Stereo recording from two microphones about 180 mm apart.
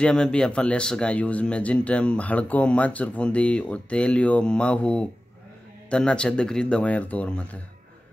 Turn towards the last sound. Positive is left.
turn(degrees=5)  # may be behind; listen again after turning